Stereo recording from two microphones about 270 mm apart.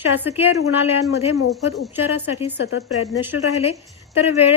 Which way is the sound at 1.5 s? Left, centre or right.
Centre.